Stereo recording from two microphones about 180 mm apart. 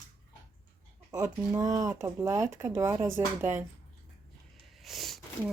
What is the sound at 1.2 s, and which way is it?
Speech, 20° right (ahead or behind).